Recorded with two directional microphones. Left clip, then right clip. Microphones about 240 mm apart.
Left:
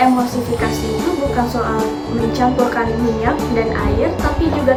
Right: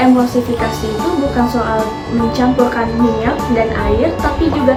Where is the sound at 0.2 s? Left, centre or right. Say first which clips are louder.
Right 3 dB; centre.